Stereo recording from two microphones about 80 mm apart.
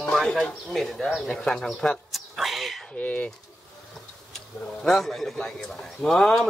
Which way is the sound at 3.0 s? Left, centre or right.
Centre.